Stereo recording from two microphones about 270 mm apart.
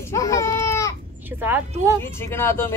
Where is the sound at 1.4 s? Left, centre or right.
Centre.